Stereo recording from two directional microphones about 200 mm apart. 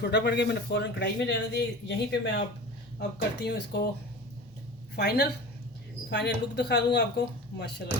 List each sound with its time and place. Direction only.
0.0 s speech: 60° left (ahead or behind)
4.9 s speech: 55° left (ahead or behind)